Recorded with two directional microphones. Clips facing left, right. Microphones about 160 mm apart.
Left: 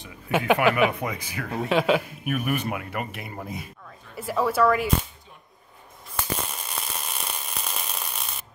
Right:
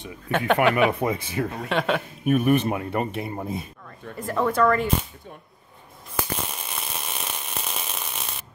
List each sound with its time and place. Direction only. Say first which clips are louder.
0.3 s a woman's voice: right 1 dB; 10° left (ahead or behind)
0.9 s speech: right 6 dB; 25° right (ahead or behind)
1.7 s speech: left 5 dB; centre (ahead or behind)
2.2 s speech: right 7 dB; 30° right (ahead or behind)
4.2 s a woman's voice: even; 5° left (ahead or behind)
6.1 s a sound: right 1 dB; 5° right (ahead or behind)